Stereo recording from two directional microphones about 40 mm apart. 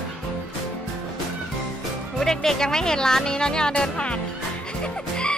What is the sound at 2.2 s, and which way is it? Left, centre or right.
Speech, centre.